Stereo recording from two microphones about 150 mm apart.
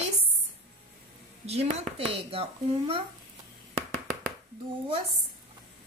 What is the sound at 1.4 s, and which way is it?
Speech, 45° right (ahead or behind).